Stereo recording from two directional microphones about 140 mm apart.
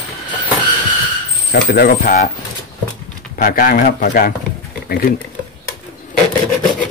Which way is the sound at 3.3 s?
90° left.